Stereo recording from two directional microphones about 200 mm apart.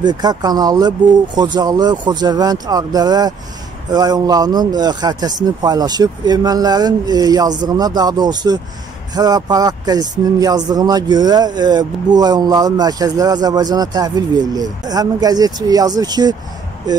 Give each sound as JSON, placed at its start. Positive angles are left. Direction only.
{"t": 0.0, "sound": "speech", "side_deg": -20}